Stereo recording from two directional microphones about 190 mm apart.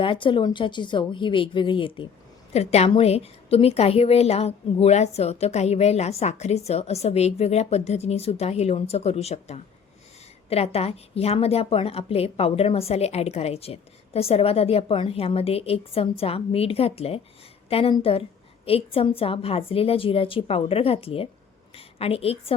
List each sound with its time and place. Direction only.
0.0 s a woman's voice: 25° left (ahead or behind)